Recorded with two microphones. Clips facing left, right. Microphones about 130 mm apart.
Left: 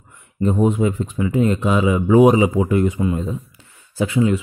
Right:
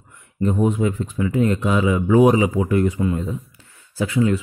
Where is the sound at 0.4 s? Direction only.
25° left (ahead or behind).